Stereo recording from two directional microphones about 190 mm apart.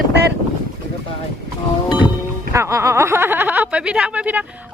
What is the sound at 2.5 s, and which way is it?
Speech, 15° right (ahead or behind).